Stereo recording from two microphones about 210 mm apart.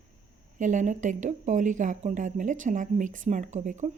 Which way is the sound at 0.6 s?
35° right (ahead or behind).